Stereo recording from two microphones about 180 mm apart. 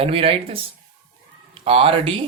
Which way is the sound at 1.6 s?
30° right (ahead or behind).